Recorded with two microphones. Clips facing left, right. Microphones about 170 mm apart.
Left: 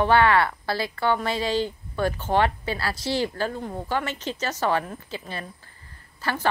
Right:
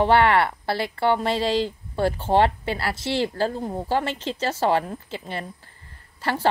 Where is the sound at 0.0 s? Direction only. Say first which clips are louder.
Right 1 dB; 25° right (ahead or behind).